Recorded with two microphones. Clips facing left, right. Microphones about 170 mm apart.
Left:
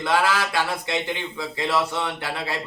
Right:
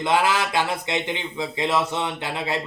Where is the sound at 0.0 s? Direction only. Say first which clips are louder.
Right 1 dB; 20° right (ahead or behind).